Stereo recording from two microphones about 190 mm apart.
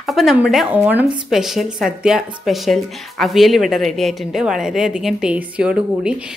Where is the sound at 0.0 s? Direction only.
Centre (ahead or behind).